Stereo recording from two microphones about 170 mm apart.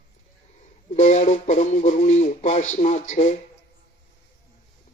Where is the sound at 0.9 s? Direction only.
45° left (ahead or behind).